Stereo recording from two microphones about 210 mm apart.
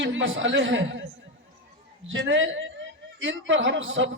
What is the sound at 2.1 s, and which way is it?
A man's voice, 65° right (ahead or behind).